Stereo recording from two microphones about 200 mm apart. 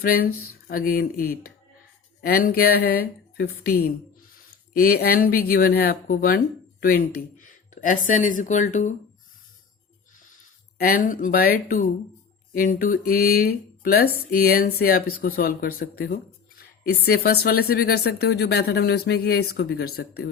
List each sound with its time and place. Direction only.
0.0 s speech: 50° left (ahead or behind)
10.2 s speech: 45° left (ahead or behind)